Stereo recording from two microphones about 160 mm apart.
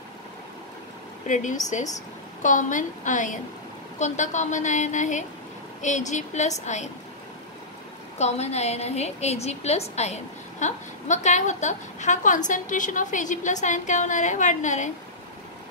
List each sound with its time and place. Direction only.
1.2 s a woman's voice: 50° left (ahead or behind)
8.2 s a woman's voice: 45° left (ahead or behind)